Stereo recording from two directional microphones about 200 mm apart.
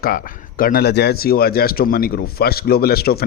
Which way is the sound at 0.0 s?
45° left (ahead or behind).